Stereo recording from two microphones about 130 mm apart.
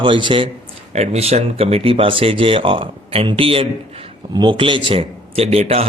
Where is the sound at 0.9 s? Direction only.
55° right (ahead or behind).